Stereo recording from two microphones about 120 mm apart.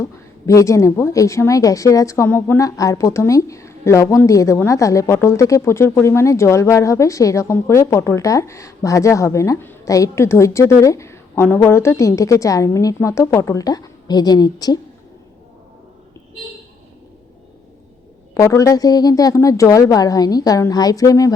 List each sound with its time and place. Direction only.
0.0 s a woman's voice: 25° left (ahead or behind)
18.3 s a woman's voice: 25° left (ahead or behind)